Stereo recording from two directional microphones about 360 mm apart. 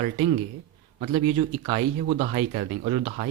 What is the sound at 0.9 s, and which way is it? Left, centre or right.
A man's voice, centre.